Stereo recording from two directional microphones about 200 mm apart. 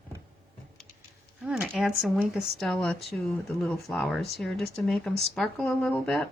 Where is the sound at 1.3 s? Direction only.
5° right (ahead or behind).